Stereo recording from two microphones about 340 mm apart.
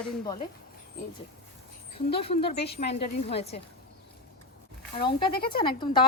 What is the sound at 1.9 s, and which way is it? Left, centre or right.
Speech, centre.